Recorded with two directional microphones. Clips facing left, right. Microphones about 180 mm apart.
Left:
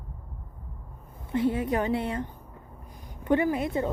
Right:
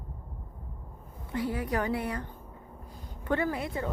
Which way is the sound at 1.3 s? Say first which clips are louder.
Left 5 dB; 25° left (ahead or behind).